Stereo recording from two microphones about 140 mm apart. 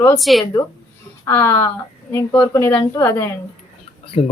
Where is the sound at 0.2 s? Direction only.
Centre (ahead or behind).